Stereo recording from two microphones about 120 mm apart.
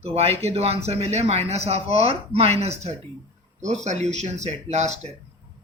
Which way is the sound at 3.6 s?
75° right (ahead or behind).